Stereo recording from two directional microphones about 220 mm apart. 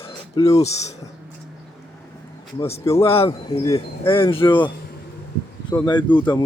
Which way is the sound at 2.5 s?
25° left (ahead or behind).